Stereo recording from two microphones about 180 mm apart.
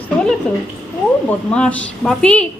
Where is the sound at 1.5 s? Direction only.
5° left (ahead or behind).